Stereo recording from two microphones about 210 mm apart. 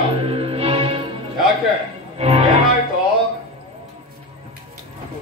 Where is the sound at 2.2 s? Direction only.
30° right (ahead or behind).